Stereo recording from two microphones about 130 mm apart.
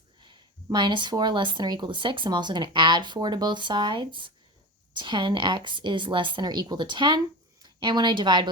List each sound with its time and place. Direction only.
0.2 s speech: 35° right (ahead or behind)